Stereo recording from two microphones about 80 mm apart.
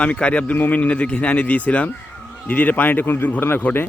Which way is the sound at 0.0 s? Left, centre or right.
Centre.